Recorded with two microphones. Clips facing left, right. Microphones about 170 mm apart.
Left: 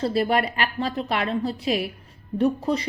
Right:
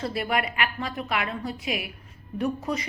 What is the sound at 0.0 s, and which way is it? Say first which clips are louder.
A woman's voice: left 5 dB; 30° left (ahead or behind).